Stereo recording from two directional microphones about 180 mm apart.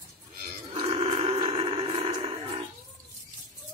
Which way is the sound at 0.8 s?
30° right (ahead or behind).